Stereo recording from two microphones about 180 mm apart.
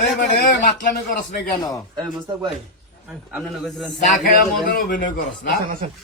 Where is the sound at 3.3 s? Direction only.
Centre (ahead or behind).